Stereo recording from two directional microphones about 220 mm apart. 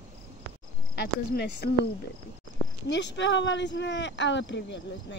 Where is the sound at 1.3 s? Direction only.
45° left (ahead or behind).